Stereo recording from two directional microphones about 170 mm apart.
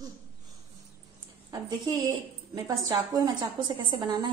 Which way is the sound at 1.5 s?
25° right (ahead or behind).